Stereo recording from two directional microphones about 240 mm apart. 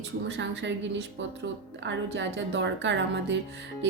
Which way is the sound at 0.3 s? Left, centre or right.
Right.